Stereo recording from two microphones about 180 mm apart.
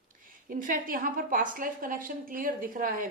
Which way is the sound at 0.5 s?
50° right (ahead or behind).